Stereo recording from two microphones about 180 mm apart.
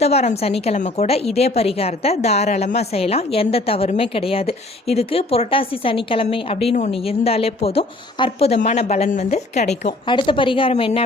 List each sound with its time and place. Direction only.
0.0 s a woman's voice: 35° left (ahead or behind)
10.1 s speech: 30° left (ahead or behind)